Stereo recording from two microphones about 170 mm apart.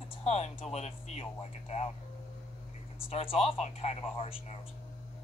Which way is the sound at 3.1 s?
35° left (ahead or behind).